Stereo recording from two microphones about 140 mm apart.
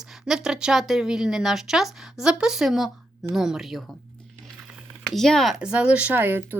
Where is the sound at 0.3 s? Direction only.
5° right (ahead or behind).